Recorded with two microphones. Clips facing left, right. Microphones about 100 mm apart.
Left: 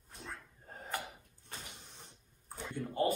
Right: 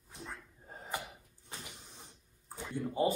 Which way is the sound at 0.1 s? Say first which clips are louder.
Right 1 dB; 10° right (ahead or behind).